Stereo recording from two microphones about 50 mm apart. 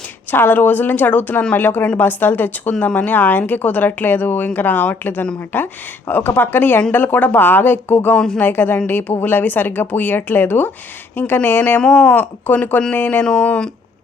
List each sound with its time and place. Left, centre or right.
0.3 s speech: left
8.1 s speech: centre
8.4 s speech: left
11.8 s speech: left
12.5 s speech: left
13.2 s speech: left